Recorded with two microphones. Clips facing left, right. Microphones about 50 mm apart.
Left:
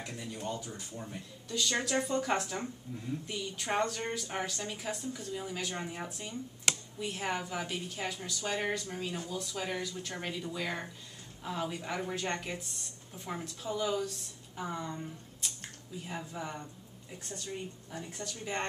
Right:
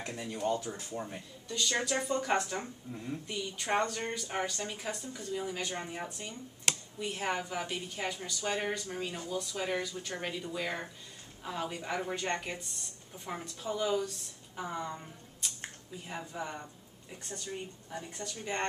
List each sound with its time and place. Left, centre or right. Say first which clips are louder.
0.0 s speech: right 5 dB; right
0.7 s speech: right 5 dB; right
1.5 s a woman's voice: even; centre
17.9 s a woman's voice: right 1 dB; centre